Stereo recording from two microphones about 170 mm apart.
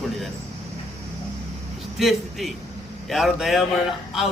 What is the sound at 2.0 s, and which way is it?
A man's voice, centre (ahead or behind).